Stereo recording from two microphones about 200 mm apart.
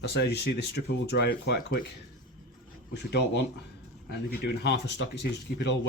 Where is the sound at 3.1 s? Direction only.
60° left (ahead or behind).